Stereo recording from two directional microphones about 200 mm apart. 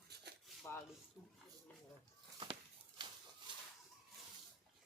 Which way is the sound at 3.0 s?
20° right (ahead or behind).